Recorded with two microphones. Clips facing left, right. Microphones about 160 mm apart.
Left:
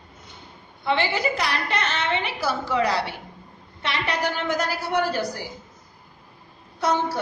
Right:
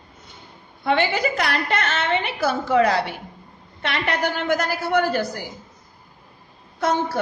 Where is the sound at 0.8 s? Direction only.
50° right (ahead or behind).